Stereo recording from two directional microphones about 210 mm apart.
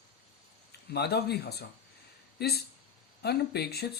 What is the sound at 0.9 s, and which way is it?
Speech, 50° left (ahead or behind).